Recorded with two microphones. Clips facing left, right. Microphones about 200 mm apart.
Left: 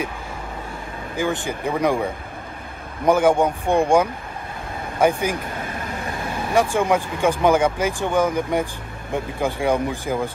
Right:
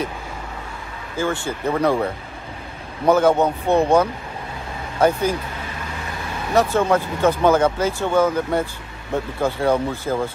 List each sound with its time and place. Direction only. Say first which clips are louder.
1.1 s speech: even; 15° left (ahead or behind)
3.1 s speech: right 1 dB; 10° left (ahead or behind)
6.5 s speech: right 1 dB; 10° left (ahead or behind)